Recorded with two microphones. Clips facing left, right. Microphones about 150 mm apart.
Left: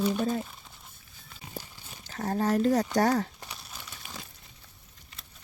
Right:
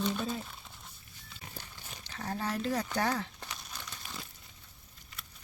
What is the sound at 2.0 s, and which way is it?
Speech, 40° left (ahead or behind).